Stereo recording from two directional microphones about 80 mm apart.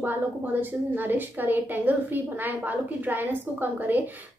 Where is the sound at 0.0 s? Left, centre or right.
Right.